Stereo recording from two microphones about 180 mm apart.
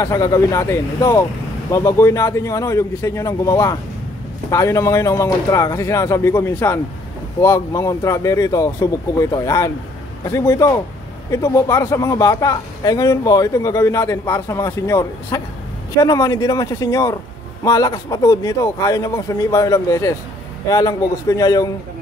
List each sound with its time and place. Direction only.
0.0 s speech: 20° left (ahead or behind)